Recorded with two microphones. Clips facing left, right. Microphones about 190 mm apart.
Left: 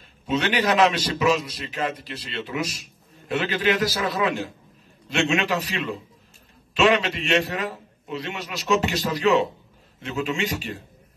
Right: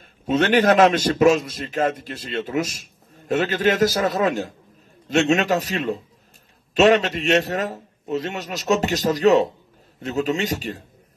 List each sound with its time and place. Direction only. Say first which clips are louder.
0.3 s a man's voice: right 6 dB; 50° right (ahead or behind)